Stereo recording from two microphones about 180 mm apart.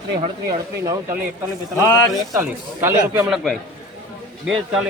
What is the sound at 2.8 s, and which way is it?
Speech, 5° right (ahead or behind).